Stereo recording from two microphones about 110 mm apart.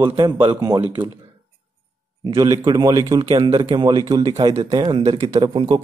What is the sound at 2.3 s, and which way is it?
Speech, 30° right (ahead or behind).